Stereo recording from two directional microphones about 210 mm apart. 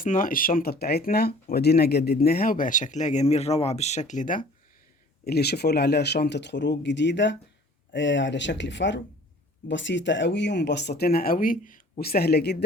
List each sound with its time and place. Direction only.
0.0 s speech: 40° left (ahead or behind)
5.2 s speech: 50° left (ahead or behind)